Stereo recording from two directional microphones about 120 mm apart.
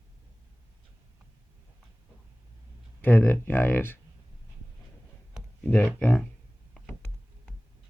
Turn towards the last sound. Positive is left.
turn(degrees=10)  # may be behind; listen again after turning